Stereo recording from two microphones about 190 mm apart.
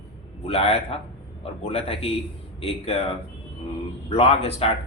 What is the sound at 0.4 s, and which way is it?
Speech, 30° left (ahead or behind).